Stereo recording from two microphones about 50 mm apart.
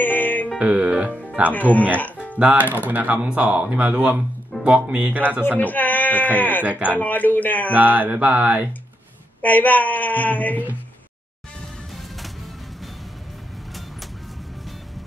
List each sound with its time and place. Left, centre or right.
0.0 s music: left
0.6 s speech: right
1.5 s speech: left
2.5 s mantra: right
3.3 s speech: right
5.6 s speech: left
6.6 s mantra: right
7.0 s speech: left
7.7 s mantra: right
9.4 s speech: left